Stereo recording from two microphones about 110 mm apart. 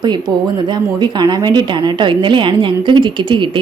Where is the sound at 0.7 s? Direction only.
40° right (ahead or behind).